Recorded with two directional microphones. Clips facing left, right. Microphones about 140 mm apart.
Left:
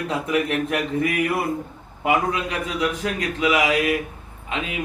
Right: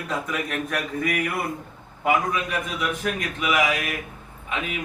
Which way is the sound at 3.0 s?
35° left (ahead or behind).